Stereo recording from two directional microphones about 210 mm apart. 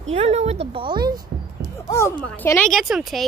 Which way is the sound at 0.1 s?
30° right (ahead or behind).